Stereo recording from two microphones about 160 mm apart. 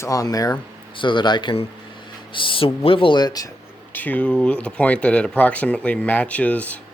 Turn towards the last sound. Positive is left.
turn(degrees=10)  # may be behind; listen again after turning